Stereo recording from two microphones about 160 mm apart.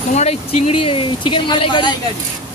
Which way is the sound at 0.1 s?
45° left (ahead or behind).